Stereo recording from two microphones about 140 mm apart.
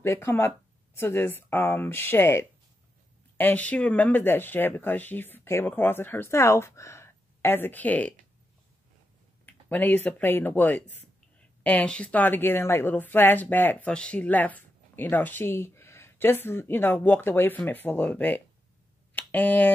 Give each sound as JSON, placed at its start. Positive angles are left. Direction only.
{"t": 0.0, "sound": "a woman's voice", "side_deg": 20}
{"t": 9.5, "sound": "a woman's voice", "side_deg": 15}